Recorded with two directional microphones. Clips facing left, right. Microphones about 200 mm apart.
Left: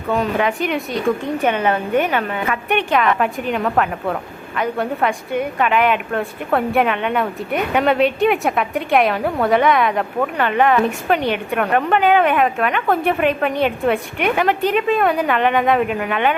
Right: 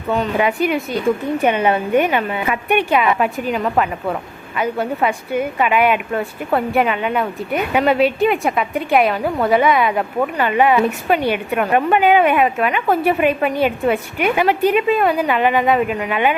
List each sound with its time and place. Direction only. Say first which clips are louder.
0.3 s a woman's voice: right 2 dB; 10° right (ahead or behind)